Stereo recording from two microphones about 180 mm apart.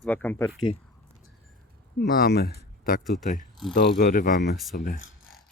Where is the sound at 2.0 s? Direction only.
60° left (ahead or behind).